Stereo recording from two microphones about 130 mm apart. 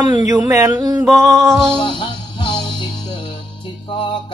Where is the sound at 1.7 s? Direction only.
40° left (ahead or behind).